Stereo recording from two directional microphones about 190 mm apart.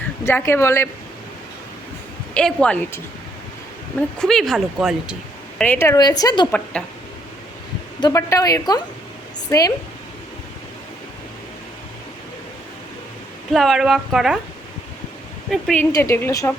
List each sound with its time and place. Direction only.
0.3 s a woman's voice: 10° left (ahead or behind)
2.3 s speech: 5° left (ahead or behind)
4.2 s speech: centre (ahead or behind)
5.5 s a woman's voice: 10° left (ahead or behind)
8.0 s a woman's voice: 15° left (ahead or behind)
13.5 s speech: centre (ahead or behind)
15.4 s a woman's voice: centre (ahead or behind)